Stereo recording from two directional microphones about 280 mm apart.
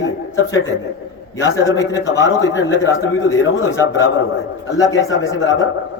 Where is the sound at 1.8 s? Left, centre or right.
Centre.